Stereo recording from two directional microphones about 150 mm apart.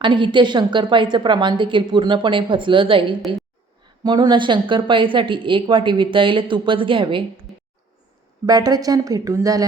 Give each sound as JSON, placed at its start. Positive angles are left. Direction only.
{"t": 0.0, "sound": "a woman's voice", "side_deg": -30}
{"t": 8.4, "sound": "a woman's voice", "side_deg": -25}